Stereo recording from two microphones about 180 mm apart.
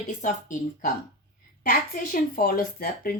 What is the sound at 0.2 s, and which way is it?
A woman's voice, 45° left (ahead or behind).